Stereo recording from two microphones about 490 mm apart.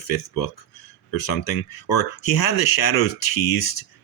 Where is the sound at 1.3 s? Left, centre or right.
Left.